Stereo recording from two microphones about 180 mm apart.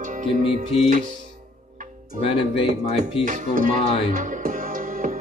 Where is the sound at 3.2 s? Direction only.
45° right (ahead or behind).